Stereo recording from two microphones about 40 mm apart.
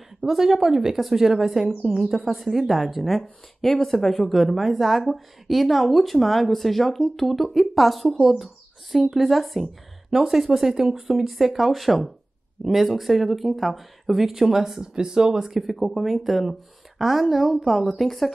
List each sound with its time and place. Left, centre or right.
0.2 s a woman's voice: centre
2.2 s a woman's voice: centre